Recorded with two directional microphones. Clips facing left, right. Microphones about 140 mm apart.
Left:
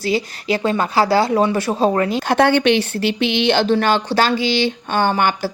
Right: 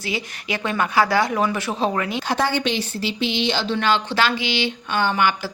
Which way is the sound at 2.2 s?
60° left (ahead or behind).